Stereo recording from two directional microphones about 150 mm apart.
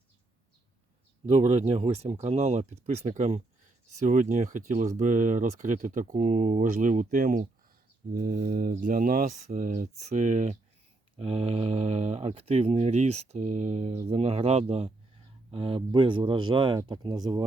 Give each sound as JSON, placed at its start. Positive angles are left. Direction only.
{"t": 1.3, "sound": "speech", "side_deg": -50}
{"t": 8.1, "sound": "mantra", "side_deg": -75}
{"t": 8.7, "sound": "speech", "side_deg": -65}
{"t": 11.2, "sound": "speech", "side_deg": -40}